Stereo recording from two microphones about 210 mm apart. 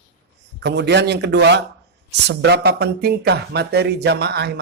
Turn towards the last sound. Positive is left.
turn(degrees=-50)  # may be behind; listen again after turning